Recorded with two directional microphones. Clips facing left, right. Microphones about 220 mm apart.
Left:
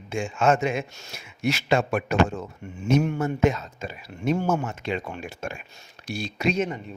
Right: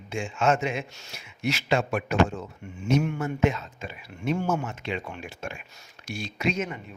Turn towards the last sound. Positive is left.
turn(degrees=35)  # may be behind; listen again after turning